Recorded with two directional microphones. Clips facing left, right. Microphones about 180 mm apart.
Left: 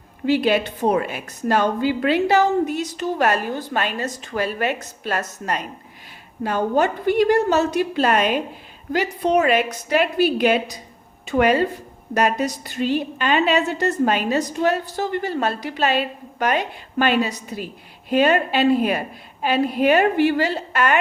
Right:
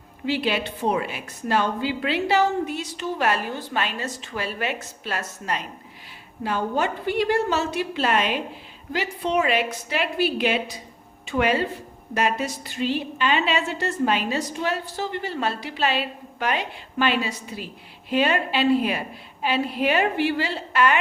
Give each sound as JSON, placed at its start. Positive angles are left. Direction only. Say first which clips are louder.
{"t": 0.3, "sound": "a woman's voice", "louder": "left 6 dB", "side_deg": 45}